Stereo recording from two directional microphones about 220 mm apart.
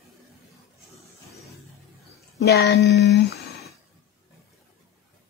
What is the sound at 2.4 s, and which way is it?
Speech, 45° left (ahead or behind).